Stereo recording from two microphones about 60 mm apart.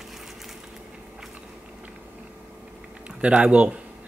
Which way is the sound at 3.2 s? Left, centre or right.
Right.